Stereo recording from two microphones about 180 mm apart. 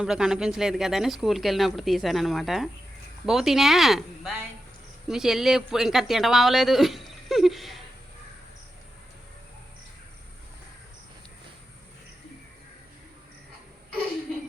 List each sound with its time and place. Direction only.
0.0 s speech: 5° right (ahead or behind)